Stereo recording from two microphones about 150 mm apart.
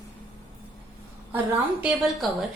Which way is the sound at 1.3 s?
10° right (ahead or behind).